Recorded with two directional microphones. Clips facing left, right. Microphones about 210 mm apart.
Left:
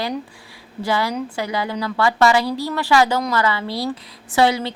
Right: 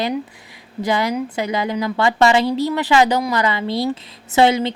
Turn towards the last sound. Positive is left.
turn(degrees=-20)  # may be behind; listen again after turning